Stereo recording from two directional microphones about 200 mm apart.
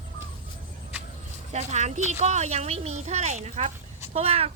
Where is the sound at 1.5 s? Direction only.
35° right (ahead or behind).